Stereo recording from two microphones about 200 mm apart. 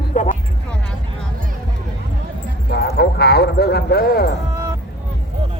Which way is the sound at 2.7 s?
55° left (ahead or behind).